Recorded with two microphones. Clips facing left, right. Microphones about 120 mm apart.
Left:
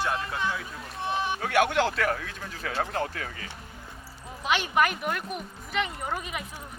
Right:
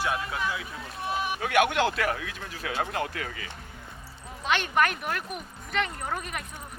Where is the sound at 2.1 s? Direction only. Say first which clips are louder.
Left 1 dB; 5° right (ahead or behind).